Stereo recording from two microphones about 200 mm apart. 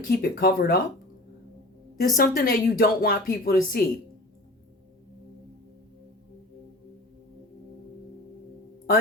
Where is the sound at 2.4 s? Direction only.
45° left (ahead or behind).